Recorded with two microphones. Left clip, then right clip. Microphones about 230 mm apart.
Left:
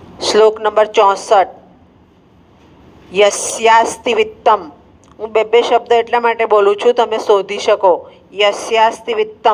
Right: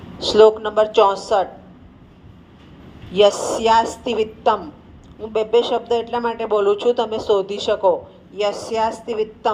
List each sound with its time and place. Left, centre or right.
0.2 s speech: left
3.1 s speech: left